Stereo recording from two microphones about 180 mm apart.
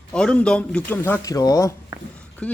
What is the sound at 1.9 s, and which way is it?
Speech, 20° right (ahead or behind).